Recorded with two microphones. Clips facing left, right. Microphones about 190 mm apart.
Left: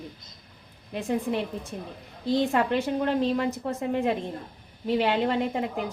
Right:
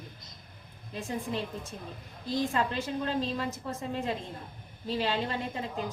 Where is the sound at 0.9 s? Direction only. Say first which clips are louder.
Left 7 dB; 60° left (ahead or behind).